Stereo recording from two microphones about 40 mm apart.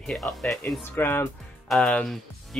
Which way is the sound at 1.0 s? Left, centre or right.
Left.